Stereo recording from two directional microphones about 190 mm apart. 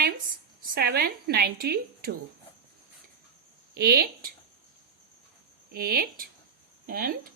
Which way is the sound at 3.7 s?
55° right (ahead or behind).